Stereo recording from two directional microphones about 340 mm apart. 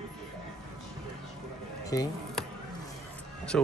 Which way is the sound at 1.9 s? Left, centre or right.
Centre.